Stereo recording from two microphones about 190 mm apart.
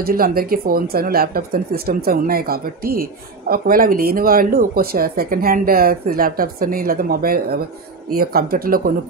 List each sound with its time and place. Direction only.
0.0 s speech: 50° right (ahead or behind)